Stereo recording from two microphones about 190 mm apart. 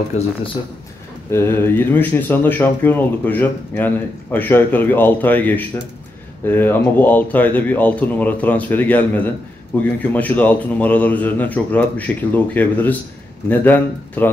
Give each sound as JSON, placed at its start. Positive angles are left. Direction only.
{"t": 0.1, "sound": "speech", "side_deg": 35}
{"t": 1.3, "sound": "speech", "side_deg": 10}